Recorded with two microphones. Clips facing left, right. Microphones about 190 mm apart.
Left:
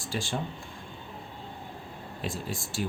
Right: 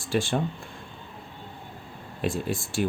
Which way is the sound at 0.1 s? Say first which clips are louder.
Right 8 dB; 60° right (ahead or behind).